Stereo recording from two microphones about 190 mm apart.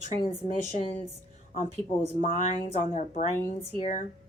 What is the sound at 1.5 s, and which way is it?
A woman's voice, 40° left (ahead or behind).